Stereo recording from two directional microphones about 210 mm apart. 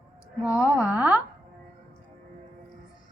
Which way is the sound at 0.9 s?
5° right (ahead or behind).